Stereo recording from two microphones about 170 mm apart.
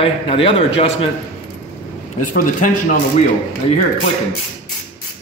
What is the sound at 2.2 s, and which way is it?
Speech, 50° left (ahead or behind).